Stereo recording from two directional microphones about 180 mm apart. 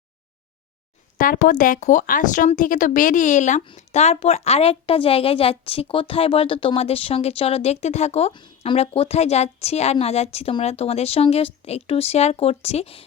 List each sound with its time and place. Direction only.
1.2 s a woman's voice: 50° left (ahead or behind)